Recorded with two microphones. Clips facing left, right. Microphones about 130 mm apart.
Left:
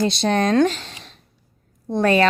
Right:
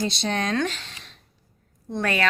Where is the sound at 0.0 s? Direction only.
60° left (ahead or behind).